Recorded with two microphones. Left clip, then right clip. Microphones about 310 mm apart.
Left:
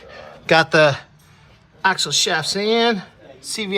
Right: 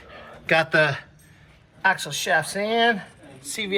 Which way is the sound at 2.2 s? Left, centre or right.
Centre.